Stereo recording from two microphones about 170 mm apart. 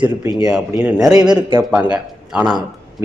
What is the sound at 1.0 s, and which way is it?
Speech, 20° right (ahead or behind).